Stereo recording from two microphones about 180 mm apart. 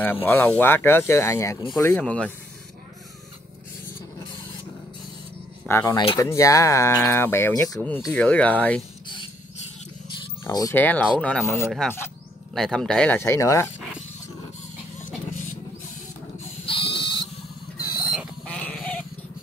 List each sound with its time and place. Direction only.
0.0 s speech: 10° left (ahead or behind)
5.7 s speech: 20° left (ahead or behind)
8.1 s speech: 5° left (ahead or behind)
10.4 s speech: 15° left (ahead or behind)
16.6 s a sound: 30° left (ahead or behind)
18.1 s goat: centre (ahead or behind)